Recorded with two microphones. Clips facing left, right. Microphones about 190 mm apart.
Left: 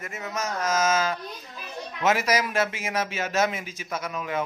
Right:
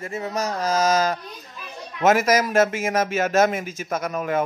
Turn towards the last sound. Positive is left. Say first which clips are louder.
# right 6 dB
turn(degrees=-50)  # may be behind; listen again after turning